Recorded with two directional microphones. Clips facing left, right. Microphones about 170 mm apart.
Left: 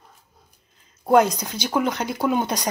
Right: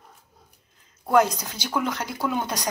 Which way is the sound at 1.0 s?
20° left (ahead or behind).